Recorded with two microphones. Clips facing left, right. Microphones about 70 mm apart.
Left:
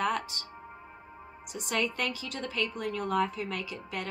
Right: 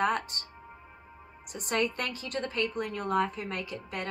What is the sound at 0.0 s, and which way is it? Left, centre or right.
Speech, right.